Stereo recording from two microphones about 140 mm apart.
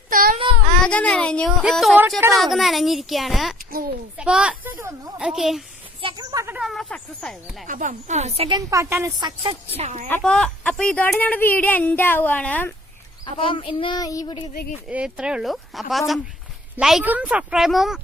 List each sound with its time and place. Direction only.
0.1 s child singing: 85° right
0.9 s a child's voice: 10° left (ahead or behind)
3.6 s a sound: 90° right
4.2 s speech: 5° right (ahead or behind)
6.0 s a sound: 40° right (ahead or behind)
6.3 s a sound: 20° right (ahead or behind)
6.6 s speech: centre (ahead or behind)
7.7 s speech: 65° right (ahead or behind); by 8.5 s 45° right (ahead or behind)
8.5 s a woman's voice: 20° right (ahead or behind)
9.2 s a woman's voice: 40° right (ahead or behind); by 10.1 s 55° right (ahead or behind)
10.1 s speech: 5° left (ahead or behind)
13.2 s speech: 40° left (ahead or behind)
14.8 s speech: 10° right (ahead or behind)